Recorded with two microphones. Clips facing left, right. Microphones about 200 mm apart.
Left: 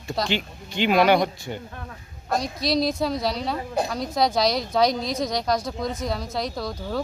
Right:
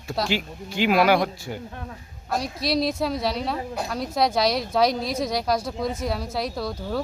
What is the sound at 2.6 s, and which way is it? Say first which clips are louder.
Speech: even; 5° right (ahead or behind).